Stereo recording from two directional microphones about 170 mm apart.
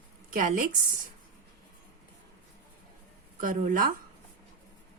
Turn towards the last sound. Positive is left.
turn(degrees=-55)  # may be behind; listen again after turning